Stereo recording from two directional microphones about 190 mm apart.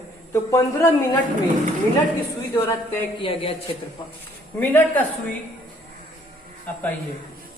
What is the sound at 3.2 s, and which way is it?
Speech, 30° left (ahead or behind).